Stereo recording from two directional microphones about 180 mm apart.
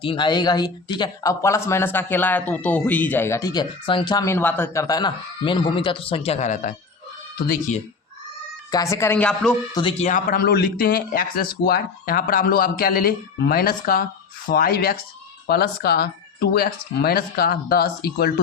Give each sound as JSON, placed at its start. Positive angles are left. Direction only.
{"t": 0.0, "sound": "speech", "side_deg": 25}
{"t": 8.7, "sound": "speech", "side_deg": 15}
{"t": 10.0, "sound": "speech", "side_deg": 45}